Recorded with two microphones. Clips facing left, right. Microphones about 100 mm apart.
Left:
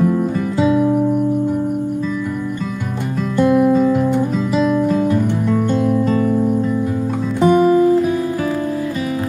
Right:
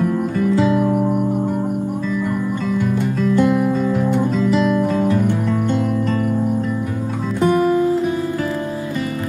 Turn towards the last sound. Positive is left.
turn(degrees=10)  # may be behind; listen again after turning